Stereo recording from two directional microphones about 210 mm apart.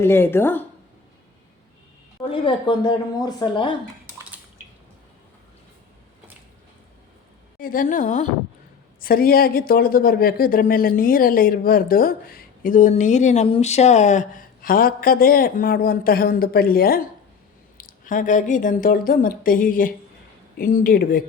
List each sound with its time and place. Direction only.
0.0 s speech: 10° left (ahead or behind)
2.3 s speech: 25° left (ahead or behind)
7.6 s a woman's voice: 40° left (ahead or behind)